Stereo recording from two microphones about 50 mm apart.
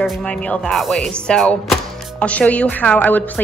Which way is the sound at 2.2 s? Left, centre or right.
Left.